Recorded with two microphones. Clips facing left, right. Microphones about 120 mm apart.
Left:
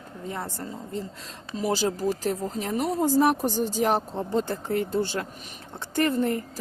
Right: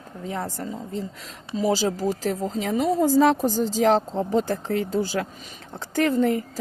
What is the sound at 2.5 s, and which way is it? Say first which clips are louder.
Speech: right 4 dB; 90° right.